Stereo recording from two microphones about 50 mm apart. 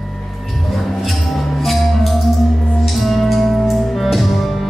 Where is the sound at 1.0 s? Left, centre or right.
Centre.